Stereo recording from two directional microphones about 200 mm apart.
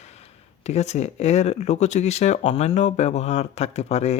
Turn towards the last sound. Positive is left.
turn(degrees=30)  # may be behind; listen again after turning